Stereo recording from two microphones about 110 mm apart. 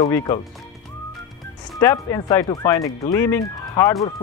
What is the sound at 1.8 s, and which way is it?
Speech, 25° left (ahead or behind).